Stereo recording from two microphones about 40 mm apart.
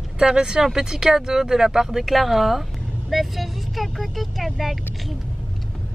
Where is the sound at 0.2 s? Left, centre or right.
Centre.